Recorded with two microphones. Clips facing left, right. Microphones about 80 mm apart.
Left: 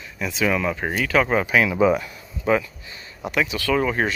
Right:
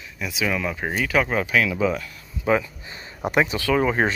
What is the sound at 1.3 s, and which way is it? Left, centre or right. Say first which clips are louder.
Speech: left 2 dB; centre.